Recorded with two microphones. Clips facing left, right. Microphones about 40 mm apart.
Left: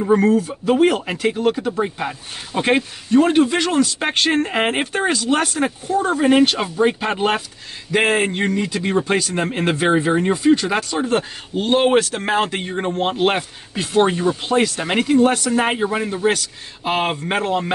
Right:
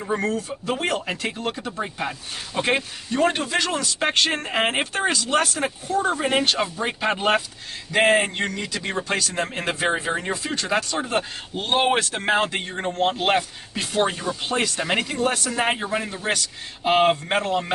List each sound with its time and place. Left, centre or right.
0.0 s speech: centre
11.1 s speech: centre
12.6 s speech: centre